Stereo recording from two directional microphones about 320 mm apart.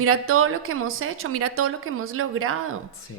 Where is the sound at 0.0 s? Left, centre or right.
Right.